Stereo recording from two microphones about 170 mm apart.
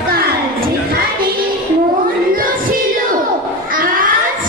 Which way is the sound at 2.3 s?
55° right (ahead or behind).